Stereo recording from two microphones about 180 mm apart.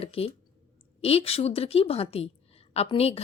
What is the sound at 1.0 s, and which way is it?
Speech, 35° left (ahead or behind).